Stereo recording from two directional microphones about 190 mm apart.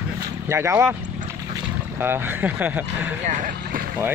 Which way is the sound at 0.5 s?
15° right (ahead or behind).